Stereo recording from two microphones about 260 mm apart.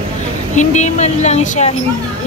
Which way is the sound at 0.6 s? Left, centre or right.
Left.